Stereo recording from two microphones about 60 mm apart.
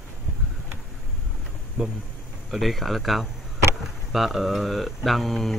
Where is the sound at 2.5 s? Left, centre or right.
Centre.